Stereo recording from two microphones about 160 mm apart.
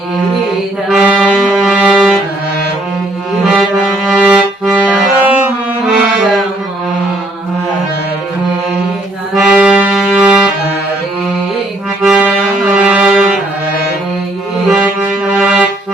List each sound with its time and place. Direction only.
0.9 s music: 5° right (ahead or behind)
3.4 s music: 5° right (ahead or behind)
9.3 s music: 5° right (ahead or behind)
12.0 s music: 5° right (ahead or behind)
15.3 s music: 5° right (ahead or behind)